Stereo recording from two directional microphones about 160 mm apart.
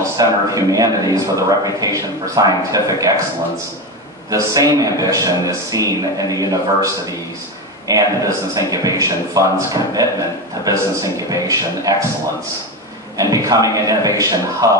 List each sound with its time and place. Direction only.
0.2 s a man's voice: 20° right (ahead or behind)
4.3 s a man's voice: 20° right (ahead or behind)
7.9 s a man's voice: 20° right (ahead or behind)
13.2 s a man's voice: 20° right (ahead or behind)